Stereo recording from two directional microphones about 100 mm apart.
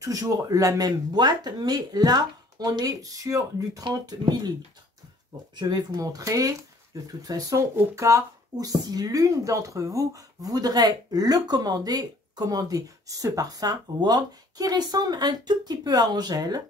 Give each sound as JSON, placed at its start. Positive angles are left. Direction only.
{"t": 0.0, "sound": "speech", "side_deg": -35}
{"t": 5.6, "sound": "speech", "side_deg": -40}